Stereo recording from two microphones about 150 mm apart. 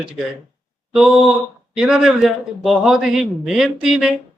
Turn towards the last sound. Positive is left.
turn(degrees=-5)  # may be behind; listen again after turning